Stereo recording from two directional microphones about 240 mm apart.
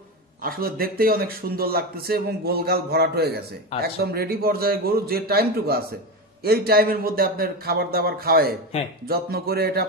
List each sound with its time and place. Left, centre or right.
0.4 s a man's voice: right